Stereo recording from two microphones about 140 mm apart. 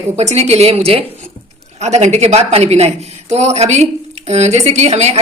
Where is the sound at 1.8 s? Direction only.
55° right (ahead or behind).